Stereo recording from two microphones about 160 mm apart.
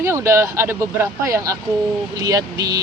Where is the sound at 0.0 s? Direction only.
15° right (ahead or behind).